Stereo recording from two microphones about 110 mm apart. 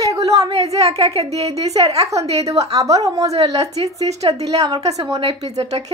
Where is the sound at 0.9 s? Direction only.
70° right (ahead or behind).